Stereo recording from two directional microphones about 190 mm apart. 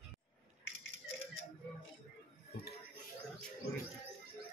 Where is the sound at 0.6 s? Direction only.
90° left.